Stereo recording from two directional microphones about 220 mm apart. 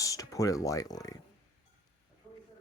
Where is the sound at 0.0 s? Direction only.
15° left (ahead or behind).